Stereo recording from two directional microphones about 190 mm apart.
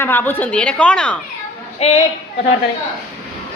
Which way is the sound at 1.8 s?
35° left (ahead or behind).